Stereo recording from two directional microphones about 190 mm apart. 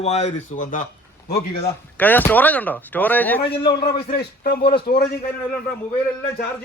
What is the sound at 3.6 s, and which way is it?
A man's voice, 60° left (ahead or behind).